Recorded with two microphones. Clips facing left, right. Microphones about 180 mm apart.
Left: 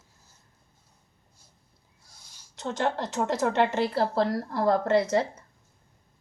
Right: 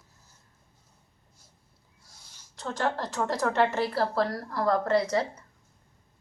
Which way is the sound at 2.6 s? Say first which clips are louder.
Left 2 dB; 20° left (ahead or behind).